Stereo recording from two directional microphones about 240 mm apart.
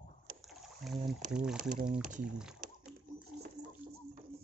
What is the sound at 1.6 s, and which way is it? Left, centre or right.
Speech, right.